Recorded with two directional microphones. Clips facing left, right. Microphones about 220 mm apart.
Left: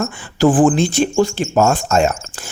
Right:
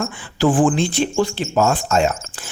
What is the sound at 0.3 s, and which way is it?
Speech, 40° left (ahead or behind).